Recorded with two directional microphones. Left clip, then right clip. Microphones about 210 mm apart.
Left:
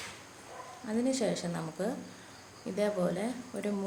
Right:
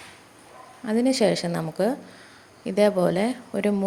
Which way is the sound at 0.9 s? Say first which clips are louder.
Right 10 dB; 40° right (ahead or behind).